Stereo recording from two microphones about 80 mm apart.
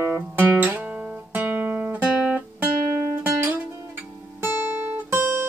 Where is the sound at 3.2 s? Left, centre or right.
Right.